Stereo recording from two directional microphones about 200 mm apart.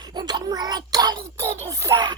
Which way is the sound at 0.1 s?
20° right (ahead or behind).